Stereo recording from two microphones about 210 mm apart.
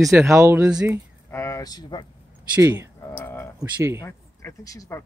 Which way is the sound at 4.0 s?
15° left (ahead or behind).